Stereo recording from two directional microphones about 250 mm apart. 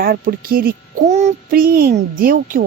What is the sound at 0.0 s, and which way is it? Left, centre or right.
A child's voice, right.